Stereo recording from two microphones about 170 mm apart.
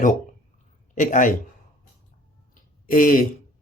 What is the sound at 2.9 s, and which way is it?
Speech, 55° left (ahead or behind).